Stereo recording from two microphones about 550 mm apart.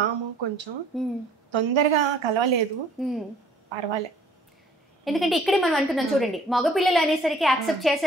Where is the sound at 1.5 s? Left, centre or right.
Right.